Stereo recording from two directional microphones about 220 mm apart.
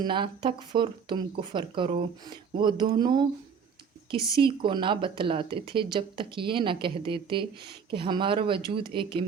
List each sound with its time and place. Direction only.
0.0 s speech: 20° right (ahead or behind)
4.3 s speech: 20° right (ahead or behind)